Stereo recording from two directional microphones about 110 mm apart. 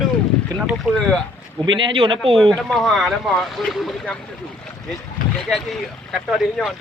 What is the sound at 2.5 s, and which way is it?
Speech, centre (ahead or behind).